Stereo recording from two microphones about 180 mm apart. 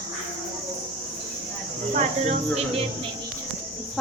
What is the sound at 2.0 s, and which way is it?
Speech, 40° right (ahead or behind).